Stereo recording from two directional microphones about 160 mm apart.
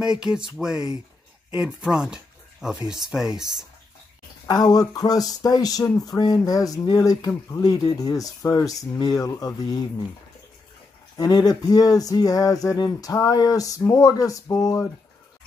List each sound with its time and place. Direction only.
0.0 s speech: 5° right (ahead or behind)
4.5 s speech: 25° left (ahead or behind)
11.1 s speech: 25° left (ahead or behind)